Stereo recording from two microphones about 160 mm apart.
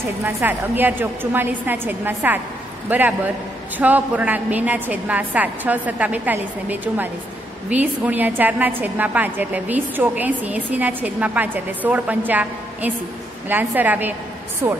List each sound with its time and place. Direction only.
0.2 s a woman's voice: 10° right (ahead or behind)